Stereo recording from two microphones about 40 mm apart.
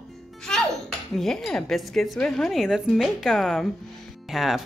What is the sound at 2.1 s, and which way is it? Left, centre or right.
Dishes, centre.